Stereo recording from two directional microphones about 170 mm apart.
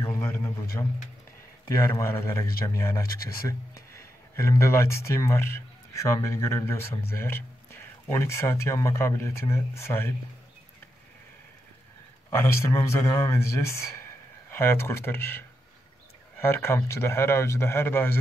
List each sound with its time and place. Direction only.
0.0 s a sound: 15° left (ahead or behind)
1.8 s a man's voice: 15° left (ahead or behind)
12.3 s a man's voice: 15° left (ahead or behind)